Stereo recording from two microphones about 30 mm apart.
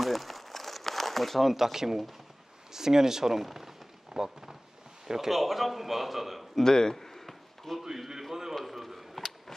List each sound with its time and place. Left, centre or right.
0.0 s crumpling: centre
1.5 s speech: centre
3.3 s a sound: centre
5.0 s speech: centre
5.3 s speech: centre
6.5 s speech: centre
7.1 s chop: centre
8.0 s a man's voice: centre
8.5 s run: centre